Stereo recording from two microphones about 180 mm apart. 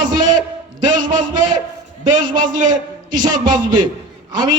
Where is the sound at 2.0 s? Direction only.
25° right (ahead or behind).